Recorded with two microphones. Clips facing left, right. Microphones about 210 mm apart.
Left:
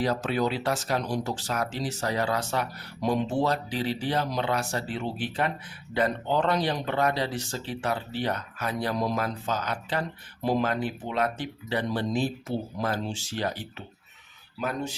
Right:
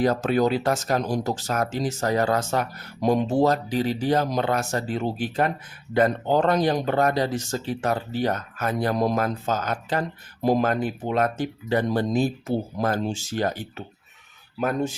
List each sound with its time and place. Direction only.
0.0 s speech: 45° right (ahead or behind)